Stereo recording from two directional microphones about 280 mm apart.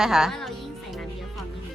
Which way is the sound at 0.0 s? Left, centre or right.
Centre.